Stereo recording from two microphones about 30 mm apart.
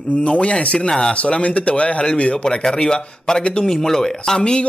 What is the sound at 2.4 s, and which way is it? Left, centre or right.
Speech, left.